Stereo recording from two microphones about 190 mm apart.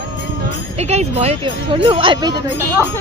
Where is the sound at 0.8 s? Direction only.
35° right (ahead or behind).